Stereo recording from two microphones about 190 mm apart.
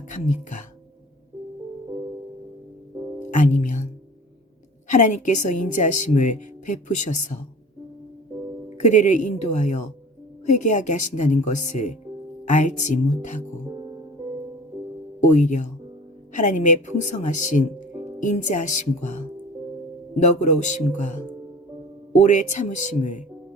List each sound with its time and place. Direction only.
0.1 s a woman's voice: 40° left (ahead or behind)
3.3 s music: 40° left (ahead or behind)
4.9 s a woman's voice: 40° left (ahead or behind)
8.8 s a woman's voice: 40° left (ahead or behind)
15.2 s a woman's voice: 40° left (ahead or behind)
20.2 s a woman's voice: 40° left (ahead or behind)